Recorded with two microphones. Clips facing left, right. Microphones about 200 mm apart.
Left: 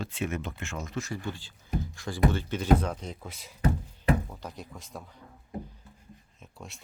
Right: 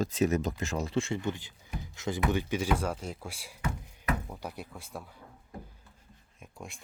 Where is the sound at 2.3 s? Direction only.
10° right (ahead or behind).